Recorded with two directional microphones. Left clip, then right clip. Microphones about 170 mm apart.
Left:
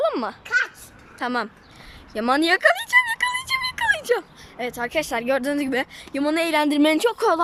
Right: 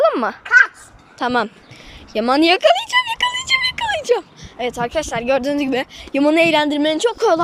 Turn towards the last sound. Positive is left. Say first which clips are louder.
# right 5 dB
turn(degrees=0)  # may be behind; listen again after turning